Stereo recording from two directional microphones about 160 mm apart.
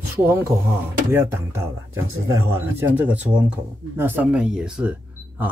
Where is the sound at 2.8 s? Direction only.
10° right (ahead or behind).